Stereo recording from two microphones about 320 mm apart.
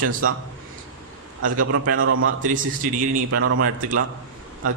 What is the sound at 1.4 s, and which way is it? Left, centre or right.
Speech, right.